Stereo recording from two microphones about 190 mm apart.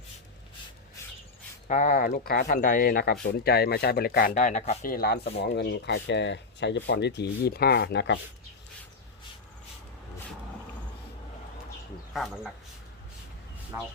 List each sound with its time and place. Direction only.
1.6 s speech: 40° left (ahead or behind)
4.8 s speech: 50° left (ahead or behind)
12.1 s speech: centre (ahead or behind)